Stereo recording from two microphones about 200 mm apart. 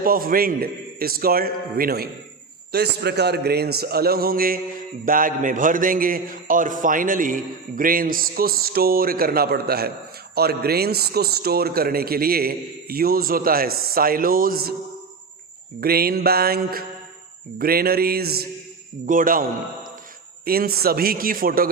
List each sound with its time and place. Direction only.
0.0 s a man's voice: 45° right (ahead or behind)
15.8 s a man's voice: 50° right (ahead or behind)